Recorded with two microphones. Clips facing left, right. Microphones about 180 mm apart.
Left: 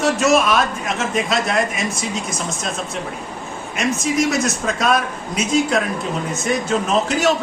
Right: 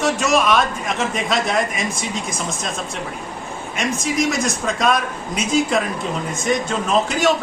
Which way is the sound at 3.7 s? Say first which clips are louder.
Left 2 dB; centre (ahead or behind).